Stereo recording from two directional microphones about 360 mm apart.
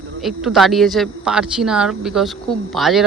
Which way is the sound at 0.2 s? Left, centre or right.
Centre.